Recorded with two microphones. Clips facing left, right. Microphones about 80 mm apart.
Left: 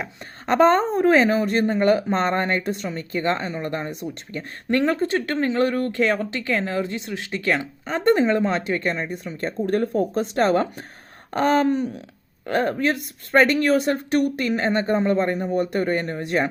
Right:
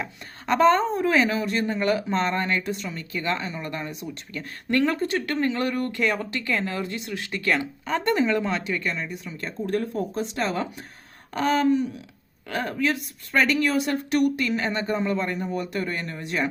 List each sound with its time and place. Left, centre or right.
0.4 s speech: left